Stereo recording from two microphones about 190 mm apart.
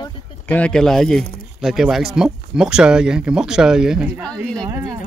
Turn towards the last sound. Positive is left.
turn(degrees=-20)  # may be behind; listen again after turning